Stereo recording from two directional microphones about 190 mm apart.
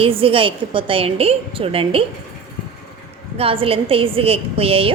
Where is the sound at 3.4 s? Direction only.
30° right (ahead or behind).